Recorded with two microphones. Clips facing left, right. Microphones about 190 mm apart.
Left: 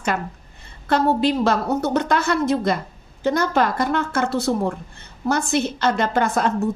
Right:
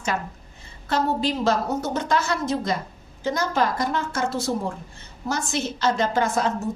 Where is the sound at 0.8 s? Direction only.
60° left (ahead or behind).